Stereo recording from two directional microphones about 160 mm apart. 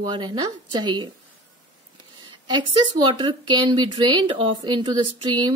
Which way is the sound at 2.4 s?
30° right (ahead or behind).